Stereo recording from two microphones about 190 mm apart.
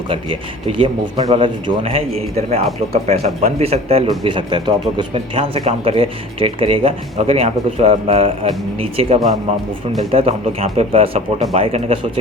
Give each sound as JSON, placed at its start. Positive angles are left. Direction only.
{"t": 0.7, "sound": "speech", "side_deg": -25}